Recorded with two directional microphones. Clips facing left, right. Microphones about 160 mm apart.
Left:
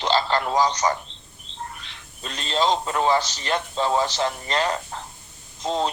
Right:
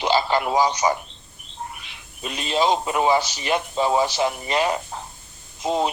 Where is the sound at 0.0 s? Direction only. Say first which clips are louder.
Right 2 dB; 10° right (ahead or behind).